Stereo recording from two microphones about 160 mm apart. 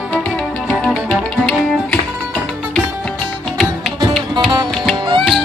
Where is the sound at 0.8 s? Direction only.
5° left (ahead or behind).